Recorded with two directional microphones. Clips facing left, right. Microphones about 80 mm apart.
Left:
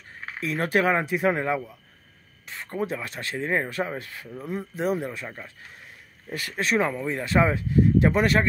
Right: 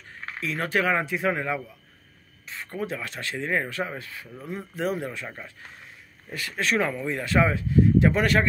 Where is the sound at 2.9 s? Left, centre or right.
Centre.